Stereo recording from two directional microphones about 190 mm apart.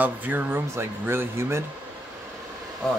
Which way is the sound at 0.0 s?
10° right (ahead or behind).